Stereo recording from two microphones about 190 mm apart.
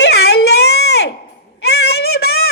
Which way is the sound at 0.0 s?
60° left (ahead or behind).